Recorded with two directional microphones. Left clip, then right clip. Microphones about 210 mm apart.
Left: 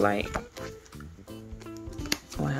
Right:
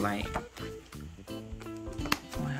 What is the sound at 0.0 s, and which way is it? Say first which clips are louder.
Speech: left 7 dB; 10° left (ahead or behind).